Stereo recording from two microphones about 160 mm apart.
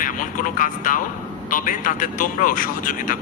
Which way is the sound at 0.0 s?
55° left (ahead or behind).